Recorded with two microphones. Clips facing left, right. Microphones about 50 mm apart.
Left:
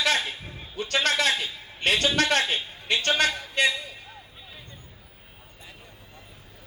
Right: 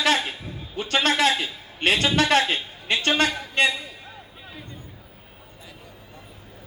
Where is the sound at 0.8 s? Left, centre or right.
Right.